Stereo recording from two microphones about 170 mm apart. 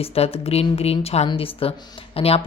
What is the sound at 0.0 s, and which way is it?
Speech, 35° left (ahead or behind).